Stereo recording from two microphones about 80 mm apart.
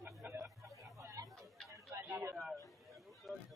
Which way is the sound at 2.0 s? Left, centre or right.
Right.